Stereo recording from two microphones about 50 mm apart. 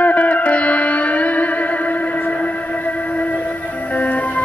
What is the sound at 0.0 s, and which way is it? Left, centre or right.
Music, left.